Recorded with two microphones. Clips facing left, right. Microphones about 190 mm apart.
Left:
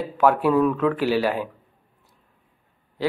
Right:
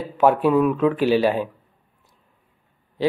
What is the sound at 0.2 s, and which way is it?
Speech, 20° right (ahead or behind).